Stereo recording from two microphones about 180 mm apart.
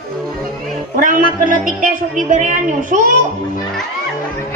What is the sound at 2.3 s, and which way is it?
Speech, 45° right (ahead or behind).